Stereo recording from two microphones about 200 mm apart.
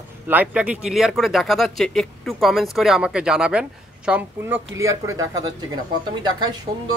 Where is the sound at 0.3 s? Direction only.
5° right (ahead or behind).